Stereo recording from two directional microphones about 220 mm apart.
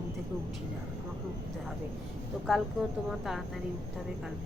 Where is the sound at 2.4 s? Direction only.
Centre (ahead or behind).